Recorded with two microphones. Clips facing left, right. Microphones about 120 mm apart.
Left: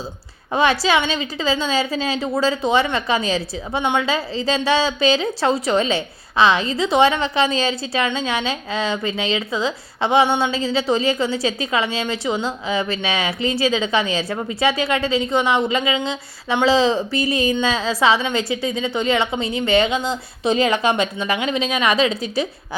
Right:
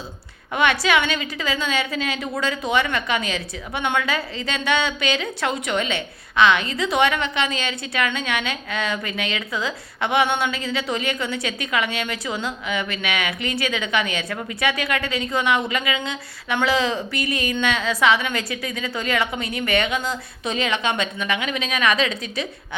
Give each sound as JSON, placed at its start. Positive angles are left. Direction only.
{"t": 0.5, "sound": "a woman's voice", "side_deg": 30}